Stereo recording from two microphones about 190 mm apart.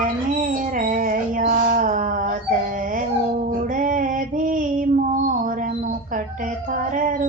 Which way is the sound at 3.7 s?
45° right (ahead or behind).